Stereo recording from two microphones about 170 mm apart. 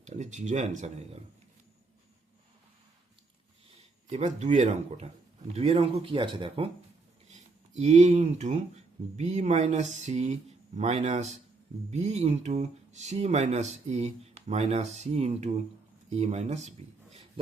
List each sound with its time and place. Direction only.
0.0 s speech: 45° right (ahead or behind)
4.1 s speech: 45° right (ahead or behind)
7.3 s speech: 40° right (ahead or behind)